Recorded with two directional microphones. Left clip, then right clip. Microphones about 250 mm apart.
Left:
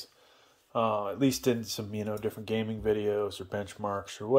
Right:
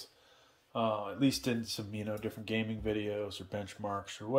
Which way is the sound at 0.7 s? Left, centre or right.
Centre.